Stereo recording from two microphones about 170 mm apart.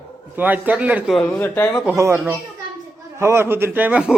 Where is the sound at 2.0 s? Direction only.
15° right (ahead or behind).